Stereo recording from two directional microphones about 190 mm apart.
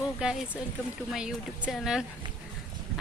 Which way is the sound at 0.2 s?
5° right (ahead or behind).